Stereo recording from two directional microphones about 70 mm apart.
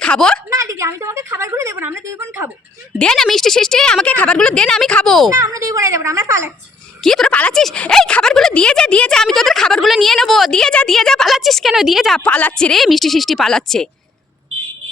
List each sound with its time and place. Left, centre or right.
0.0 s a woman's voice: centre
0.5 s a woman's voice: right
1.8 s a woman's voice: right
3.0 s speech: centre
5.3 s speech: right
7.0 s a woman's voice: centre
7.3 s speech: centre
7.5 s speech: centre
12.2 s speech: left
12.7 s speech: centre